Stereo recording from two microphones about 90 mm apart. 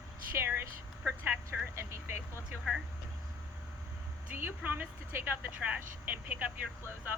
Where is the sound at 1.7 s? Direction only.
30° right (ahead or behind).